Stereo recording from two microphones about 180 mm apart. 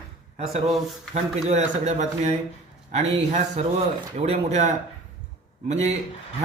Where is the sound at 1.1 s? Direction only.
40° right (ahead or behind).